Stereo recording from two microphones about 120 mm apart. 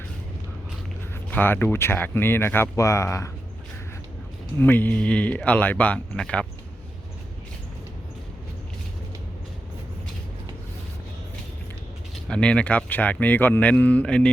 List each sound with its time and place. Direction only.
1.3 s speech: 15° left (ahead or behind)
4.6 s speech: 15° left (ahead or behind)
12.3 s speech: 10° left (ahead or behind)